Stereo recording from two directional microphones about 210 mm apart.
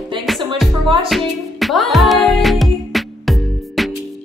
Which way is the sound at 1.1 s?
Centre (ahead or behind).